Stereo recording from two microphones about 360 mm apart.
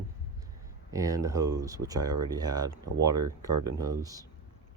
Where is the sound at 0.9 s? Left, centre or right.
Centre.